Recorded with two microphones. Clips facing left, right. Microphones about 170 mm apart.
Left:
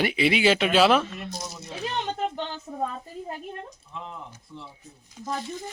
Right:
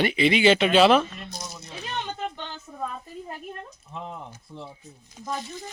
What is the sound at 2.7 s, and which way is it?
Speech, 25° left (ahead or behind).